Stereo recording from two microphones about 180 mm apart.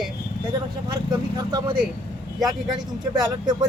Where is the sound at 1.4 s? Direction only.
20° right (ahead or behind).